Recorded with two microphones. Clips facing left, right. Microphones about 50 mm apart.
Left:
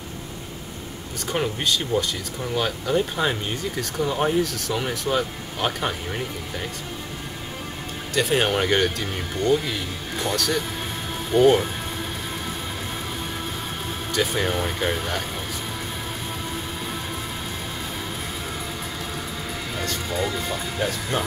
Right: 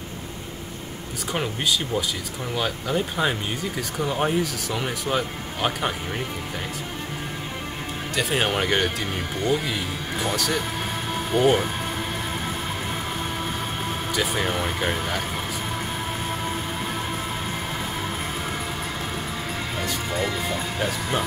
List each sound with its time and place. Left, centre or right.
1.3 s speech: centre
8.1 s speech: centre
11.3 s speech: centre
14.1 s speech: centre
20.1 s speech: right
20.8 s speech: centre